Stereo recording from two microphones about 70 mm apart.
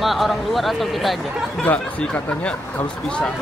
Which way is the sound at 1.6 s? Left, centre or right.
Centre.